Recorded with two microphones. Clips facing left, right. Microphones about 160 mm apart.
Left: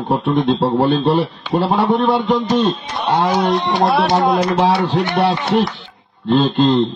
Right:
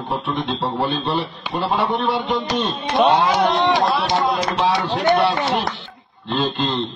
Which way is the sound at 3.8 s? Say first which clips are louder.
Left 5 dB; 60° left (ahead or behind).